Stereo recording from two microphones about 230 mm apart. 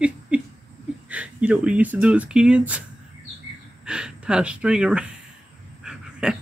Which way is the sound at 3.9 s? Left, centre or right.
Centre.